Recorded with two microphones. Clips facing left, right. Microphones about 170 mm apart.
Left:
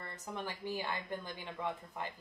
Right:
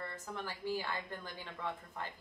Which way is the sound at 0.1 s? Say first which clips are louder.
Left 1 dB; 20° left (ahead or behind).